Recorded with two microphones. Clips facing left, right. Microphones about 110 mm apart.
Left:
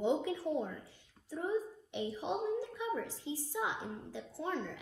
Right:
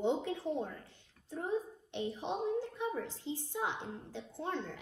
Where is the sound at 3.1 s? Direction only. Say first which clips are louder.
Even; 55° right (ahead or behind).